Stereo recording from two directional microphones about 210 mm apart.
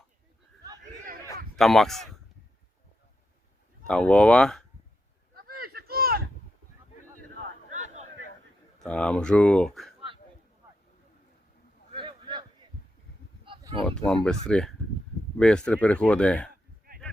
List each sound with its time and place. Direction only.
1.5 s speech: centre (ahead or behind)
3.8 s speech: 5° left (ahead or behind)
5.3 s a sound: 45° right (ahead or behind)
8.8 s speech: 5° left (ahead or behind)
11.9 s a sound: 25° right (ahead or behind)
13.8 s speech: 5° left (ahead or behind)